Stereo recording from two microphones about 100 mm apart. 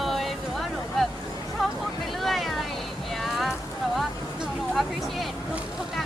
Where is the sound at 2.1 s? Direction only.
Centre (ahead or behind).